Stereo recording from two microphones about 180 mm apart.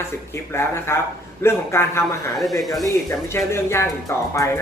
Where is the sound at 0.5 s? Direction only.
15° left (ahead or behind).